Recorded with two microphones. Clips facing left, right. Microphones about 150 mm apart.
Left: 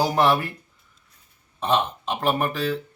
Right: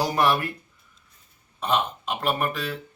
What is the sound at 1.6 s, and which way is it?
Speech, 30° left (ahead or behind).